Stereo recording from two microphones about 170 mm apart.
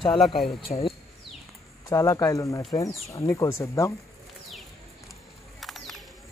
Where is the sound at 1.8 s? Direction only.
20° left (ahead or behind).